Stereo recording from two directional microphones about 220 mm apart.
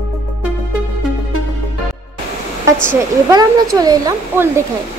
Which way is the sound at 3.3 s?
15° right (ahead or behind).